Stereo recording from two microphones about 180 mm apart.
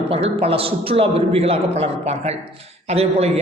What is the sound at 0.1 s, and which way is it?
A man's voice, 35° right (ahead or behind).